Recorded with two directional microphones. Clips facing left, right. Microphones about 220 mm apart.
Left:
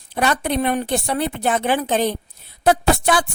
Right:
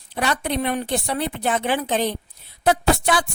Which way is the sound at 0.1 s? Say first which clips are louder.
Left 3 dB; 50° left (ahead or behind).